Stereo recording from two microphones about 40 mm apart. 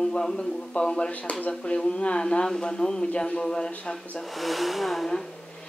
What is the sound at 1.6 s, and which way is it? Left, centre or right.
A woman's voice, left.